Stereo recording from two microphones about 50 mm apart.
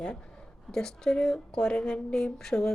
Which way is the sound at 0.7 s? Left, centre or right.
Centre.